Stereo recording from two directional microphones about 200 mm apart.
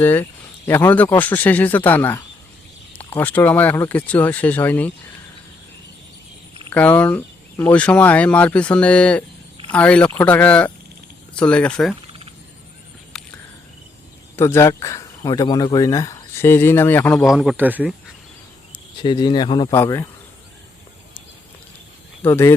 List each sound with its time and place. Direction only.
0.0 s speech: 10° left (ahead or behind)
6.7 s a man's voice: 10° left (ahead or behind)
13.1 s cricket: centre (ahead or behind)
14.3 s speech: 15° left (ahead or behind)
17.2 s a man's voice: centre (ahead or behind)
18.7 s speech: 20° left (ahead or behind)
22.2 s speech: 10° left (ahead or behind)